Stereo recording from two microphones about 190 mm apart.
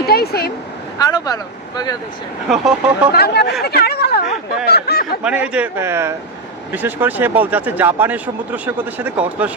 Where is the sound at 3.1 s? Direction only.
55° left (ahead or behind).